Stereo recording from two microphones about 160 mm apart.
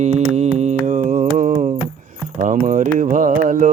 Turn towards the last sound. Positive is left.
turn(degrees=-55)  # may be behind; listen again after turning